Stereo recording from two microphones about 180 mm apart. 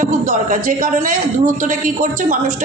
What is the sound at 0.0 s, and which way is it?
A woman's voice, 45° right (ahead or behind).